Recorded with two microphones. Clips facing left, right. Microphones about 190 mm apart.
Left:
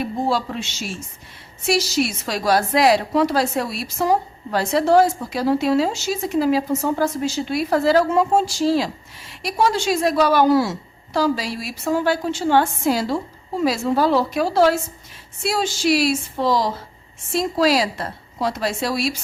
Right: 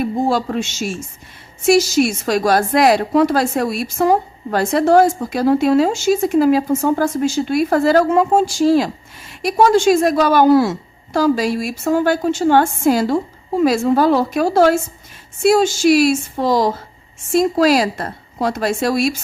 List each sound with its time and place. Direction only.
0.0 s a woman's voice: 50° right (ahead or behind)